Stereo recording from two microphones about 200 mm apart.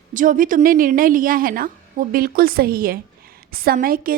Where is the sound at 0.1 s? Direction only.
40° right (ahead or behind).